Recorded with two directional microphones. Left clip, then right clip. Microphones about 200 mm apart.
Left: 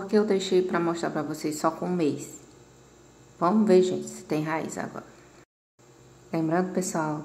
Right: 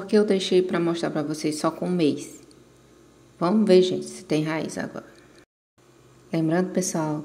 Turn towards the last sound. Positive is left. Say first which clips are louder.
# right 2 dB
turn(degrees=-30)  # may be behind; listen again after turning